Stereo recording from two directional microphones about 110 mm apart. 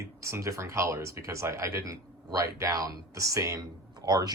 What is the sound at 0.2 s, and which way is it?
Speech, 30° right (ahead or behind).